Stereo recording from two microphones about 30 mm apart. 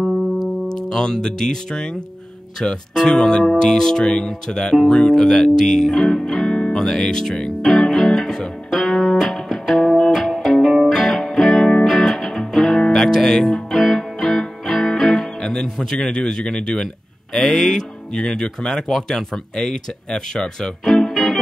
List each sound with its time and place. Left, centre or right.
0.0 s music: centre
0.7 s speech: left
3.4 s speech: centre
3.8 s speech: centre
8.3 s music: centre
8.7 s music: centre
13.7 s music: centre
14.8 s music: centre
15.4 s music: left
15.8 s speech: centre
16.8 s speech: centre
20.8 s music: centre